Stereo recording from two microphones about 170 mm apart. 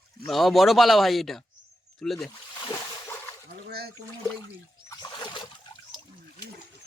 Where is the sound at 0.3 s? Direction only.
Centre (ahead or behind).